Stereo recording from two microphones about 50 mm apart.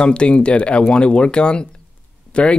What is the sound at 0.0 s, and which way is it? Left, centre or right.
Speech, centre.